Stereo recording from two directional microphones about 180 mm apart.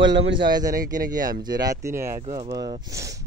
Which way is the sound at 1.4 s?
20° right (ahead or behind).